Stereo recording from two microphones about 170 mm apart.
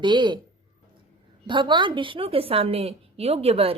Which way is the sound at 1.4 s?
30° right (ahead or behind).